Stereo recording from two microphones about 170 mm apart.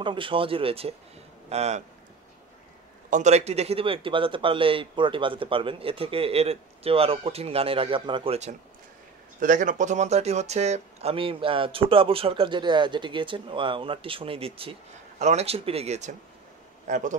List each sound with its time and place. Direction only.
0.0 s speech: 30° right (ahead or behind)
3.1 s speech: 45° right (ahead or behind)
9.4 s speech: 50° right (ahead or behind)